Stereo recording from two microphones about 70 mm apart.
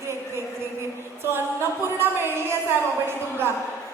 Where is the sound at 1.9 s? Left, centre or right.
Right.